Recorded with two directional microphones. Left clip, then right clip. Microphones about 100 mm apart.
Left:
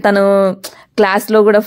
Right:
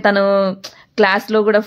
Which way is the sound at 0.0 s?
40° left (ahead or behind).